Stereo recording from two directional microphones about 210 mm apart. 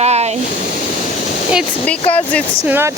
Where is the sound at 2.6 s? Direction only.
10° right (ahead or behind).